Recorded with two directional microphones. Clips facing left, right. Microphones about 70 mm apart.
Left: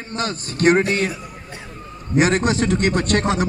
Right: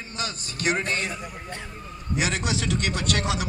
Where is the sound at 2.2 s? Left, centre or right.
Left.